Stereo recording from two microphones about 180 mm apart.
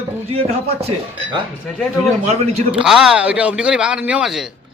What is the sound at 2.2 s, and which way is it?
Speech, 35° right (ahead or behind).